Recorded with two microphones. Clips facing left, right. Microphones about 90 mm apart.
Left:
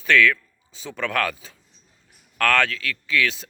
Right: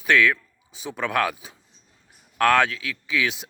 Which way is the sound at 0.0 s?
15° right (ahead or behind).